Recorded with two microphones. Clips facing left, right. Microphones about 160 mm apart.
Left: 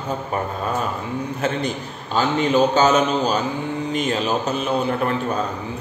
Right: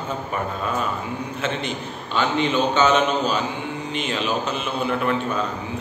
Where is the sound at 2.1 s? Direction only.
40° left (ahead or behind).